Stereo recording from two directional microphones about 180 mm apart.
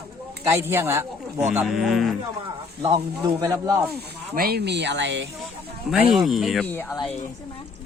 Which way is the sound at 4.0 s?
60° right (ahead or behind).